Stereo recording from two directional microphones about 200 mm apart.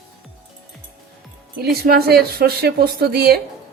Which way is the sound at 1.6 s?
50° right (ahead or behind).